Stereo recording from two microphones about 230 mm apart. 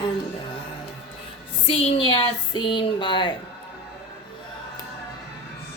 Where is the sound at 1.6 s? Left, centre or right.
Left.